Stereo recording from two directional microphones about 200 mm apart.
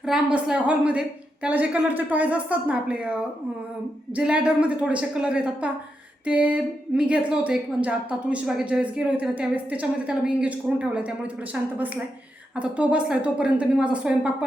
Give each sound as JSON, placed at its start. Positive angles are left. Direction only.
{"t": 0.0, "sound": "a woman's voice", "side_deg": -5}